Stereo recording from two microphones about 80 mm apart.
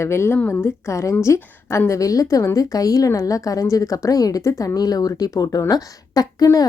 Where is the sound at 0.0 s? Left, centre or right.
Left.